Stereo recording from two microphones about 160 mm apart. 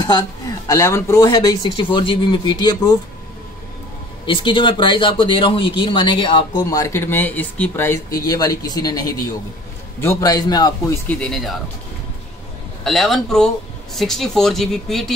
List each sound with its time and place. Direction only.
0.0 s speech: 25° left (ahead or behind)
4.3 s speech: 30° left (ahead or behind)
6.6 s speech: 20° left (ahead or behind)
11.1 s speech: 5° left (ahead or behind)
12.8 s speech: centre (ahead or behind)